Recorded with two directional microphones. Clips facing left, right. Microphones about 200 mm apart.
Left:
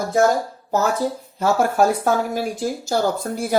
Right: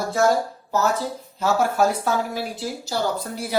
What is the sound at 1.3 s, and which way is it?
Speech, 50° left (ahead or behind).